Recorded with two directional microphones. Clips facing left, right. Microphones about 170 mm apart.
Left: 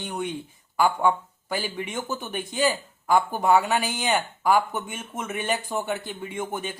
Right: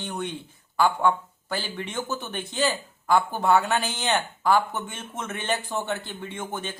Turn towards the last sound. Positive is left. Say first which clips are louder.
# left 2 dB
turn(degrees=10)  # may be behind; listen again after turning